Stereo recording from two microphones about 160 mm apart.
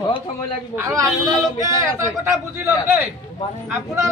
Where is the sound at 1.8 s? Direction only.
20° right (ahead or behind).